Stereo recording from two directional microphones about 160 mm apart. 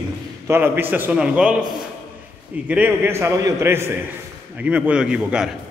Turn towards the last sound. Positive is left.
turn(degrees=-5)  # may be behind; listen again after turning